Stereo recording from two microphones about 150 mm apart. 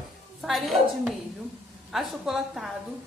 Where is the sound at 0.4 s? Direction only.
Centre (ahead or behind).